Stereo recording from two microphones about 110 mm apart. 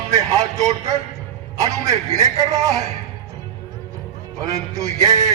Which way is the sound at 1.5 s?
30° right (ahead or behind).